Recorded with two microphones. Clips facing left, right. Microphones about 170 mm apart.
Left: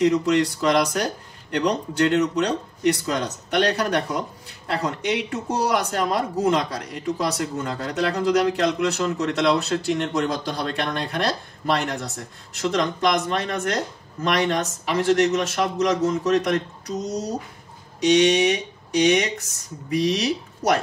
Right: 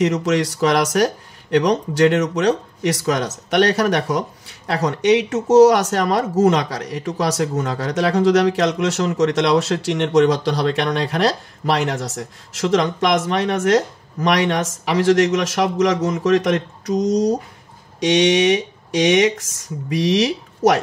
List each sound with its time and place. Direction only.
0.0 s speech: 90° right